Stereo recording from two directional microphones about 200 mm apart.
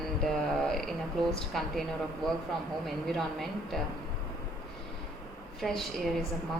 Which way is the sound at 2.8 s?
Centre (ahead or behind).